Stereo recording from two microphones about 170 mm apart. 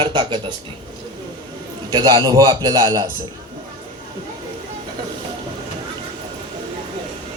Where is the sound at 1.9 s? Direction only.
25° right (ahead or behind).